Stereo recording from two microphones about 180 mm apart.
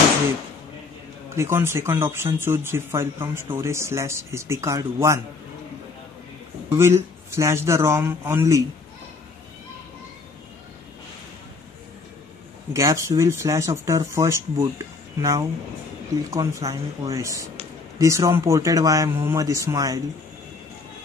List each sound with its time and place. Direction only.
1.3 s speech: 15° right (ahead or behind)
6.7 s speech: 15° right (ahead or behind)
12.7 s speech: 20° right (ahead or behind)